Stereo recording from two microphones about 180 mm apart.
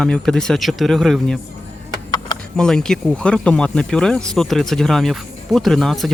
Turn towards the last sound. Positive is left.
turn(degrees=0)  # may be behind; listen again after turning